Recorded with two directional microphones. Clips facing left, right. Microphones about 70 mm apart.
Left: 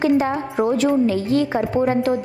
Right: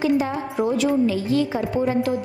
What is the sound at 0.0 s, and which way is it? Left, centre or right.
A woman's voice, left.